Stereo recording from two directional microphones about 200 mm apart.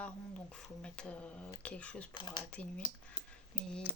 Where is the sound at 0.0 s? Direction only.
5° left (ahead or behind).